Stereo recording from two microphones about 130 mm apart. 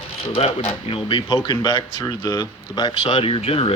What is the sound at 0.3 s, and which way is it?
Speech, 50° left (ahead or behind).